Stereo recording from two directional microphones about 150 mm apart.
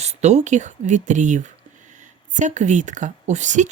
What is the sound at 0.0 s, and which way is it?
A woman's voice, 45° right (ahead or behind).